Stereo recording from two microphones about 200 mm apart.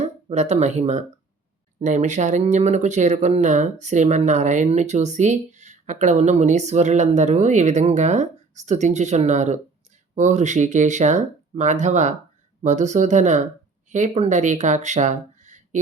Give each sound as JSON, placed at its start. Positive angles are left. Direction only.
{"t": 0.0, "sound": "speech", "side_deg": -35}